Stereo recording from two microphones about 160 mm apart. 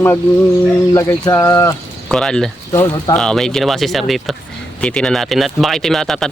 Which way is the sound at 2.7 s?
15° left (ahead or behind).